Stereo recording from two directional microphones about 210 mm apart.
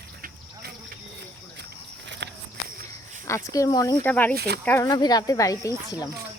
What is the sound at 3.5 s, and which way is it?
Speech, 15° left (ahead or behind).